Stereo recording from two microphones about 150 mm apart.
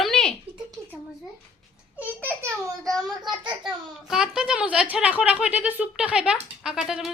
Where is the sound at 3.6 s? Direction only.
5° right (ahead or behind).